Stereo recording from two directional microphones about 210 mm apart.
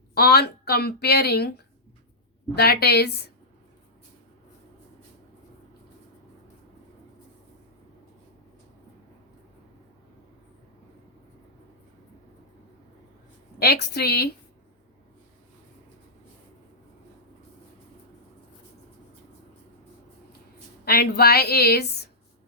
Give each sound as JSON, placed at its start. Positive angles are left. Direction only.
{"t": 0.1, "sound": "a woman's voice", "side_deg": 50}
{"t": 2.6, "sound": "a woman's voice", "side_deg": 50}
{"t": 13.6, "sound": "a woman's voice", "side_deg": 50}
{"t": 20.8, "sound": "a woman's voice", "side_deg": 50}